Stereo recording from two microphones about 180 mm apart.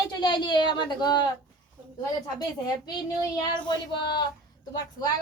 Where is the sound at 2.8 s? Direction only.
20° left (ahead or behind).